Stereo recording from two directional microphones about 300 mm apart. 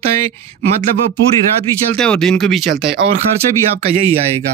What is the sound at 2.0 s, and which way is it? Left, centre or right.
Speech, centre.